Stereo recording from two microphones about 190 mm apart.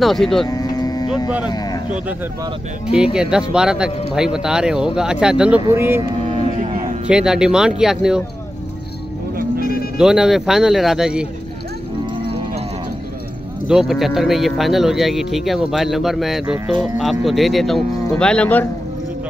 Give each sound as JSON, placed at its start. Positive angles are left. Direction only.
{"t": 0.0, "sound": "speech", "side_deg": 0}
{"t": 0.5, "sound": "cattle", "side_deg": 20}
{"t": 2.9, "sound": "speech", "side_deg": -5}
{"t": 6.2, "sound": "a sound", "side_deg": -40}
{"t": 7.1, "sound": "speech", "side_deg": -5}
{"t": 9.9, "sound": "speech", "side_deg": -5}
{"t": 13.7, "sound": "speech", "side_deg": 0}